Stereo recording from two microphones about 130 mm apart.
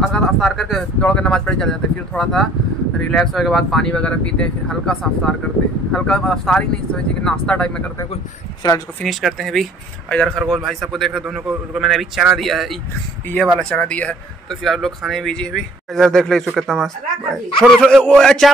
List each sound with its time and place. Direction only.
0.0 s speech: 5° left (ahead or behind)
8.6 s speech: 35° left (ahead or behind)
9.0 s speech: centre (ahead or behind)